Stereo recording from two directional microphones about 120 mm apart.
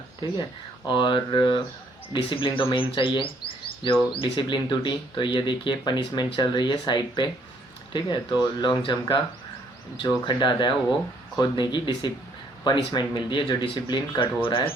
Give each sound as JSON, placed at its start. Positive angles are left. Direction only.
{"t": 0.2, "sound": "speech", "side_deg": 40}